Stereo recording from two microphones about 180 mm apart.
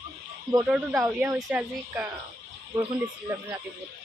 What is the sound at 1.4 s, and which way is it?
Speech, 5° right (ahead or behind).